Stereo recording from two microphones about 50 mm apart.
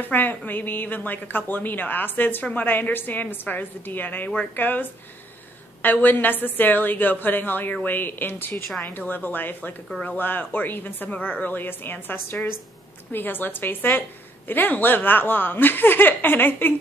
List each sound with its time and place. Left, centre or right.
0.1 s a woman's voice: left